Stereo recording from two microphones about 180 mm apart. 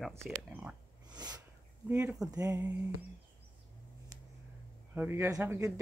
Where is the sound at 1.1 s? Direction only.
20° right (ahead or behind).